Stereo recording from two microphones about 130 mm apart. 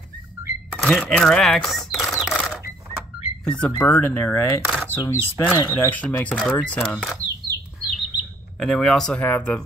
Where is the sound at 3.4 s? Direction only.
5° left (ahead or behind).